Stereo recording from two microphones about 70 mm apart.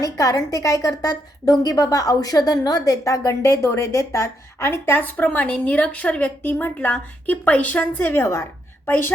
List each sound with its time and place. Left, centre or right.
0.0 s a woman's voice: left
8.9 s a woman's voice: left